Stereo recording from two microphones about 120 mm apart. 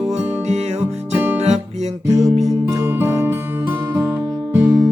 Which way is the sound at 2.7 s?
20° right (ahead or behind).